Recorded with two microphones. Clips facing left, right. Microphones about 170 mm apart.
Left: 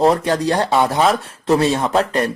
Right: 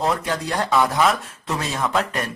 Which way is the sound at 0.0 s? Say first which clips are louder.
Left 8 dB; 35° left (ahead or behind).